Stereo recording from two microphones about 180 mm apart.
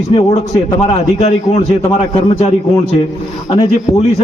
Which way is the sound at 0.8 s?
40° left (ahead or behind).